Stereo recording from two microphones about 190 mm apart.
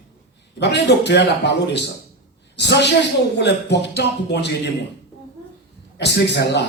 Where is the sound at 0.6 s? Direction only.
60° left (ahead or behind).